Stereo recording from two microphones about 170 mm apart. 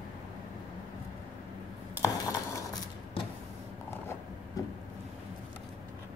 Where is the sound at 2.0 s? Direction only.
20° left (ahead or behind).